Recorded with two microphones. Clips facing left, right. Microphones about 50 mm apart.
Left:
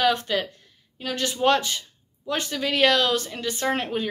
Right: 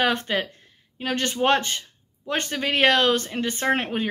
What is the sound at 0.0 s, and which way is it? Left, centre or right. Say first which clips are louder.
Speech: even; right.